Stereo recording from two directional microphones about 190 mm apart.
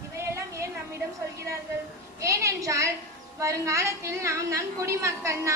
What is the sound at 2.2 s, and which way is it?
A woman's voice, 15° right (ahead or behind).